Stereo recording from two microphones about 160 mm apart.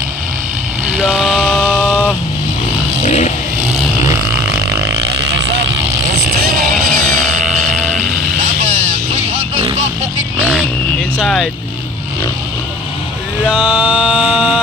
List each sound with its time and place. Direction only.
0.9 s a sound: 5° right (ahead or behind)
3.0 s vehicle: 45° left (ahead or behind)
6.7 s music: centre (ahead or behind)
8.4 s vehicle: 50° right (ahead or behind)
11.1 s vehicle: 5° left (ahead or behind)
13.5 s music: 5° right (ahead or behind)